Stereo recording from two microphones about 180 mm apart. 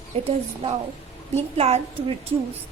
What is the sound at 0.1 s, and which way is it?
Speech, 30° right (ahead or behind).